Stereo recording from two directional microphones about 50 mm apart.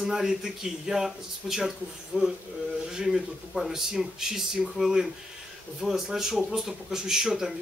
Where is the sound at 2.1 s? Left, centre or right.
Right.